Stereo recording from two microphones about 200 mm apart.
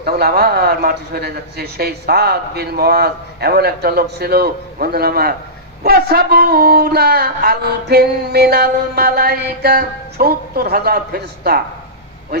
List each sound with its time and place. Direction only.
0.0 s speech: 50° right (ahead or behind)